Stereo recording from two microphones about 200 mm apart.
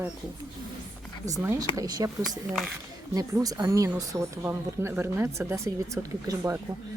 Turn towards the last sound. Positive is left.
turn(degrees=-15)  # may be behind; listen again after turning